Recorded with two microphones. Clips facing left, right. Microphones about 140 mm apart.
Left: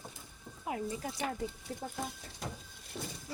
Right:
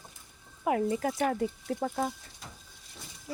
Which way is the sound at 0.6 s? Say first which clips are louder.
Right 9 dB; 75° right (ahead or behind).